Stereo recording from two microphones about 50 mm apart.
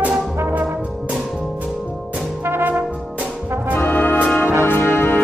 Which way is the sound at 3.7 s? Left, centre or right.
Left.